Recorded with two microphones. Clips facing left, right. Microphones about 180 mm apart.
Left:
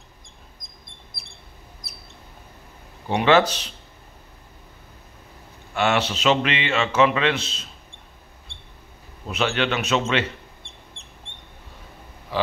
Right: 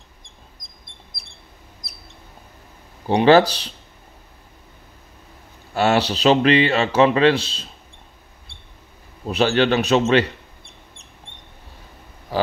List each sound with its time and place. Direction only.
3.1 s speech: 35° right (ahead or behind)
5.8 s speech: 35° right (ahead or behind)
9.3 s a man's voice: 35° right (ahead or behind)
12.3 s oink: 40° right (ahead or behind)